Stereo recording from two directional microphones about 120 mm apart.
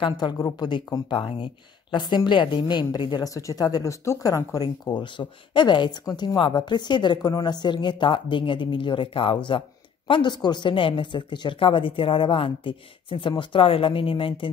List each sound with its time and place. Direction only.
0.0 s a woman's voice: 40° left (ahead or behind)